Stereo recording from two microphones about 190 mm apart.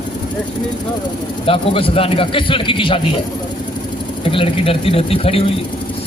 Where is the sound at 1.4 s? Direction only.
30° left (ahead or behind).